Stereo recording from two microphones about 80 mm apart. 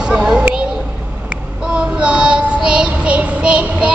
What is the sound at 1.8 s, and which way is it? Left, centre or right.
Child singing, centre.